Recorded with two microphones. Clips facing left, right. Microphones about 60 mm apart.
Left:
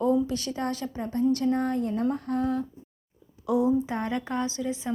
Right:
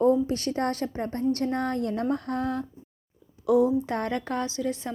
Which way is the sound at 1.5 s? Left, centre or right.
Right.